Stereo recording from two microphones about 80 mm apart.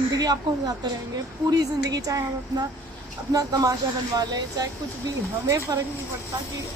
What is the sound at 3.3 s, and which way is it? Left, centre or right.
Speech, right.